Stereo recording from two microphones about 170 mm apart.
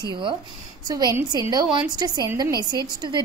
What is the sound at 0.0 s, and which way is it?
A woman's voice, 25° right (ahead or behind).